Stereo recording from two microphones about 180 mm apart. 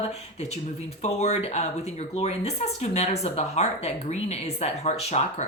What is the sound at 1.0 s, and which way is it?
Speech, 40° left (ahead or behind).